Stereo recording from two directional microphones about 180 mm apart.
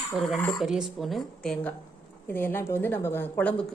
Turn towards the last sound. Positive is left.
turn(degrees=10)  # may be behind; listen again after turning